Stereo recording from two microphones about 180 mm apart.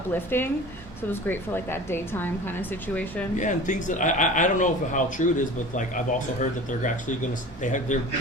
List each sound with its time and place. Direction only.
0.1 s speech: 10° left (ahead or behind)
3.3 s speech: 45° left (ahead or behind)